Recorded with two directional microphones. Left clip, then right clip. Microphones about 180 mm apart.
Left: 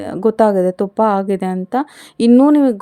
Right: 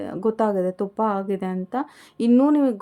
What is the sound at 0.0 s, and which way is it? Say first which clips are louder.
A woman's voice: left 9 dB; 40° left (ahead or behind).